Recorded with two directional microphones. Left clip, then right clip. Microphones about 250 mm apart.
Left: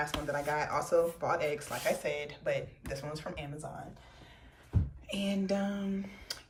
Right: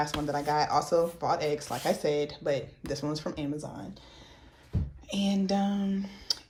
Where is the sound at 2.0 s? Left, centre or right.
Centre.